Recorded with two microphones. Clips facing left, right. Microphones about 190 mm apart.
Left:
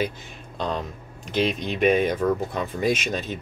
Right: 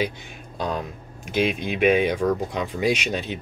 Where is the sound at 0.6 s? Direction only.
10° right (ahead or behind).